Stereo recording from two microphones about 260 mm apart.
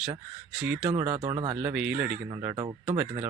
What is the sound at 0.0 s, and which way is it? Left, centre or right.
Speech, centre.